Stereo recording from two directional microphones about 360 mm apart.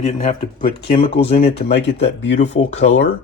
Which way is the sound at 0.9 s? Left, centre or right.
Centre.